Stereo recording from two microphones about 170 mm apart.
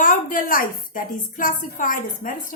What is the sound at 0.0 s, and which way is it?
A woman's voice, 55° left (ahead or behind).